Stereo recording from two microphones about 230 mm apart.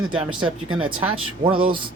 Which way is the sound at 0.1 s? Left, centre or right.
Right.